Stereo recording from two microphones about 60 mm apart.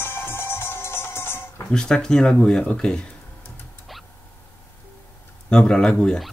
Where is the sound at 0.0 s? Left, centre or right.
Left.